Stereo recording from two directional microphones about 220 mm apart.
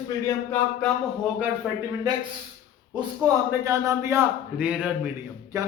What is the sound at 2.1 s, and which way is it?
A man's voice, 15° right (ahead or behind).